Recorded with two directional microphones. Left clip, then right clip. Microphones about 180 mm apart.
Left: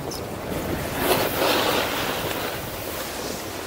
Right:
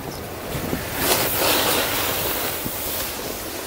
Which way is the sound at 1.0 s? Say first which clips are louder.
Even; 40° right (ahead or behind).